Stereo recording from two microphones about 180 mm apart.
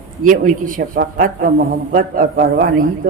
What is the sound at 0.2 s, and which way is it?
A man's voice, 45° right (ahead or behind).